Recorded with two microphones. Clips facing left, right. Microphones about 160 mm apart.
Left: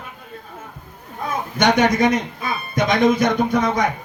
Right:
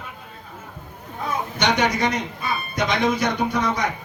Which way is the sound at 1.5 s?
50° left (ahead or behind).